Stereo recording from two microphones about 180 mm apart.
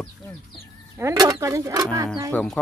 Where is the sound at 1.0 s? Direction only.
15° right (ahead or behind).